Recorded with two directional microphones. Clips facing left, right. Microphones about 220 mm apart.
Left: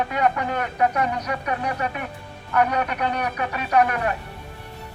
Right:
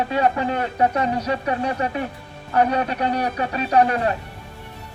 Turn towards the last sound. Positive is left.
turn(degrees=-30)  # may be behind; listen again after turning